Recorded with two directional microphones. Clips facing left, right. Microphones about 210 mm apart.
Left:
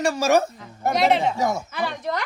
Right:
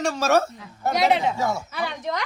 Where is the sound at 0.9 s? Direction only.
Centre (ahead or behind).